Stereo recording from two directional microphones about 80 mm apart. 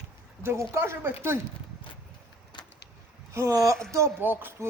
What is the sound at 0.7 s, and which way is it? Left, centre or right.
Speech, right.